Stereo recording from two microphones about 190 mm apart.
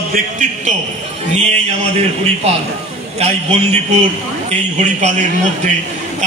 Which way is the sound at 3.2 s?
35° right (ahead or behind).